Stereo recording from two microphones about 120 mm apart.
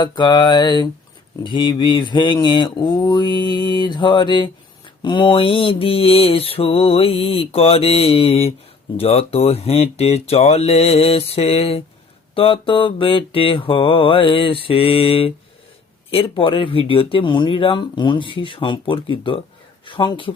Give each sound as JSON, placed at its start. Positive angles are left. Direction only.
{"t": 0.0, "sound": "speech", "side_deg": 40}